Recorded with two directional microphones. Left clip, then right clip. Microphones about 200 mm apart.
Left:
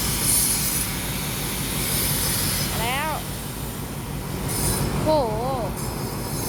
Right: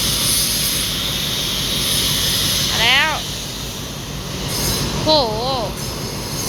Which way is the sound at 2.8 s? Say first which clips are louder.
Right 12 dB; 5° right (ahead or behind).